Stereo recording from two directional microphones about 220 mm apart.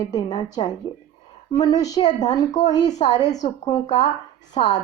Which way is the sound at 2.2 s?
30° left (ahead or behind).